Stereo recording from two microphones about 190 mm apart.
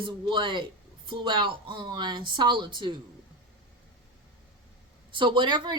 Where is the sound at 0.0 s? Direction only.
25° right (ahead or behind).